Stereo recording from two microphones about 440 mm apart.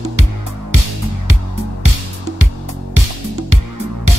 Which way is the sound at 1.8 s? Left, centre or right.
Right.